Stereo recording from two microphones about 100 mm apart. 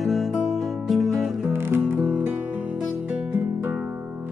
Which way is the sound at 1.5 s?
20° right (ahead or behind).